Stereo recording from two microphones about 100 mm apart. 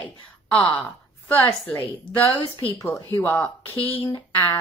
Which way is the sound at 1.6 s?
20° left (ahead or behind).